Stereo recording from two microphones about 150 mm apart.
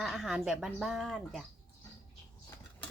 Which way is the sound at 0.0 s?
5° right (ahead or behind).